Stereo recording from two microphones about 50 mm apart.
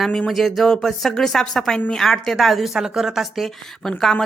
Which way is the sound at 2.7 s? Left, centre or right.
Centre.